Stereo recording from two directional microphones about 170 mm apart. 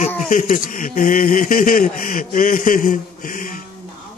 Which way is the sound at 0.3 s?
50° left (ahead or behind).